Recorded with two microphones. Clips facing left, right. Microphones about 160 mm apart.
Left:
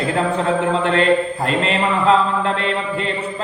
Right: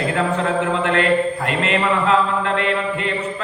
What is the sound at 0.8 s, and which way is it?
Mantra, 30° left (ahead or behind).